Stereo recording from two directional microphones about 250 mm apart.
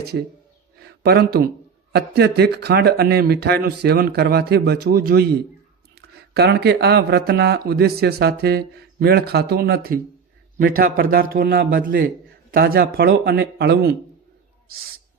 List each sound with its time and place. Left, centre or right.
0.8 s a sound: right
1.9 s speech: right
6.3 s speech: right